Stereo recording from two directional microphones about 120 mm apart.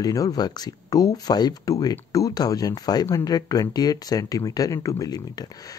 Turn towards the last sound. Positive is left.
turn(degrees=30)  # may be behind; listen again after turning